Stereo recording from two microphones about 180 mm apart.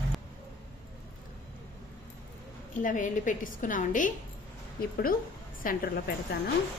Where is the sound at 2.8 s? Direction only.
45° left (ahead or behind).